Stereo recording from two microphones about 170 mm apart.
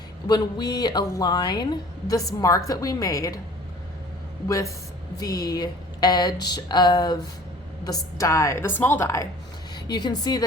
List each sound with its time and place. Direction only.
0.3 s speech: 25° left (ahead or behind)
5.2 s a woman's voice: 20° left (ahead or behind)